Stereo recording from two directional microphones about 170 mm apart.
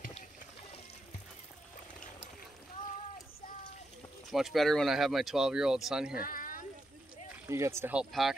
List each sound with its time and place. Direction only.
4.3 s speech: centre (ahead or behind)
6.1 s cat: 55° left (ahead or behind)
7.4 s speech: 15° right (ahead or behind)